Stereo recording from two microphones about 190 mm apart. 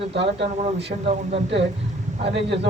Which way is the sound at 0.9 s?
40° right (ahead or behind).